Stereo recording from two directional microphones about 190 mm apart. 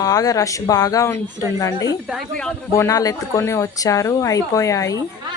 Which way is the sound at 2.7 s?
15° left (ahead or behind).